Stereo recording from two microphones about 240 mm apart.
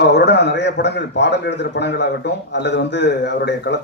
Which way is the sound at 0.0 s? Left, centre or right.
Left.